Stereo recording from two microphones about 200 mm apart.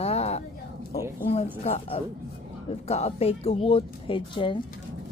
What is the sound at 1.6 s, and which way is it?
Speech, 30° left (ahead or behind).